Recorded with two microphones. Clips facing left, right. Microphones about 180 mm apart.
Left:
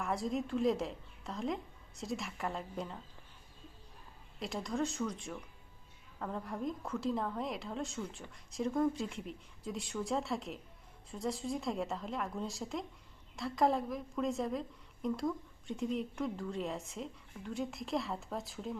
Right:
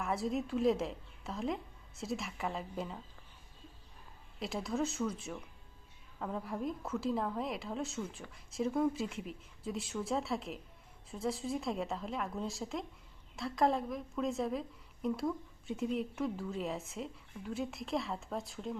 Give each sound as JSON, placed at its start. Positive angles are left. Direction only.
{"t": 0.0, "sound": "a woman's voice", "side_deg": 0}
{"t": 4.4, "sound": "a woman's voice", "side_deg": 0}